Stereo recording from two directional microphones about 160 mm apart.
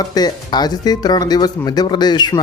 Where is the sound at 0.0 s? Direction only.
25° left (ahead or behind).